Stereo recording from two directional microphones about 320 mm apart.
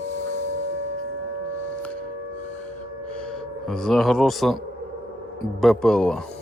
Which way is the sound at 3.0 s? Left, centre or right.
Centre.